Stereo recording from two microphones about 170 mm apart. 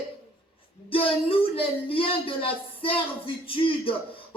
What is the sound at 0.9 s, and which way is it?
Speech, 35° left (ahead or behind).